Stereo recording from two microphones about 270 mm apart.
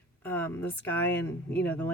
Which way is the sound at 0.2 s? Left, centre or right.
Centre.